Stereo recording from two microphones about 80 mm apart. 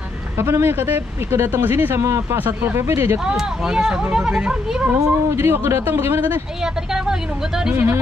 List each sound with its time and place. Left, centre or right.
0.4 s speech: right
2.3 s speech: right
3.3 s speech: centre
5.3 s speech: right
6.6 s speech: centre
7.7 s speech: right